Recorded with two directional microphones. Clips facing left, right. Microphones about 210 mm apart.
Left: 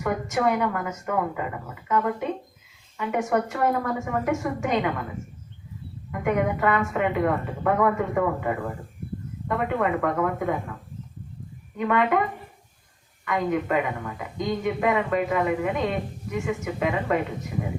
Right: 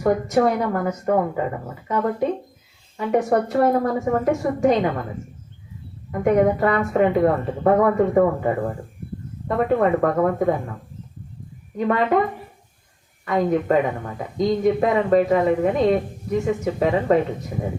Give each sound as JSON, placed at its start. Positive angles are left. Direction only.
{"t": 0.0, "sound": "a woman's voice", "side_deg": -35}
{"t": 6.1, "sound": "a woman's voice", "side_deg": -35}
{"t": 9.6, "sound": "a woman's voice", "side_deg": -35}
{"t": 11.8, "sound": "a woman's voice", "side_deg": -35}
{"t": 13.2, "sound": "a woman's voice", "side_deg": -35}